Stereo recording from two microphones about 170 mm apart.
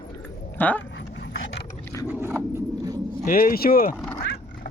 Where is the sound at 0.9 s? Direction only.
90° left.